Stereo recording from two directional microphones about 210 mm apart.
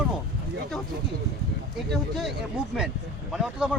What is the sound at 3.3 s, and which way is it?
Speech, 5° right (ahead or behind).